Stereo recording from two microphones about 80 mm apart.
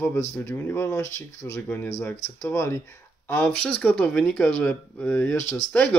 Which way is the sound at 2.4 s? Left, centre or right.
Left.